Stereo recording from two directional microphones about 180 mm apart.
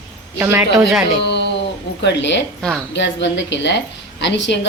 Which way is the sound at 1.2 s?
70° left (ahead or behind).